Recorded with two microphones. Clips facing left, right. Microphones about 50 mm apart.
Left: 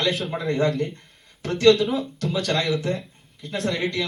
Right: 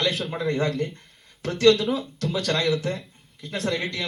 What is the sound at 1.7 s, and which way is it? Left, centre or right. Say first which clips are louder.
A man's voice: left 2 dB; centre.